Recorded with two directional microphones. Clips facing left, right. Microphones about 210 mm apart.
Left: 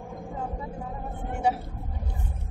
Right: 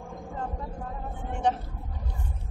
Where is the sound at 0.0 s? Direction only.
5° left (ahead or behind).